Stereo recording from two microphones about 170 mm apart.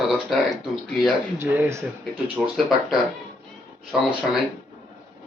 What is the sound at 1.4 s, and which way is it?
Speech, 15° right (ahead or behind).